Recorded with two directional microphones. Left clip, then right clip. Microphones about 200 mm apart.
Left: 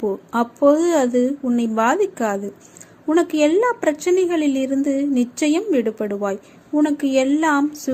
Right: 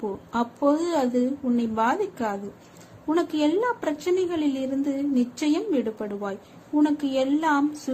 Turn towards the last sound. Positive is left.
turn(degrees=20)  # may be behind; listen again after turning